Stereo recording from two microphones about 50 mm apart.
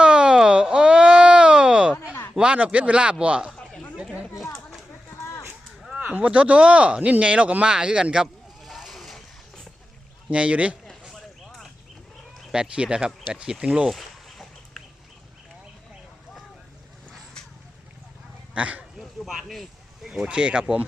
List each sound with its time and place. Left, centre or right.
0.0 s a sound: centre
2.3 s speech: right
3.6 s chatter: centre
6.1 s speech: right
8.6 s vehicle: centre
10.2 s speech: right
11.1 s a sound: centre
12.5 s speech: right
13.9 s chicken: centre
17.1 s a sound: centre
18.5 s speech: right
19.2 s speech: centre
20.1 s speech: centre